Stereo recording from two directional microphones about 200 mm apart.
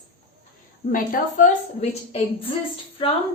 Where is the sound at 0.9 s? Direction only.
40° left (ahead or behind).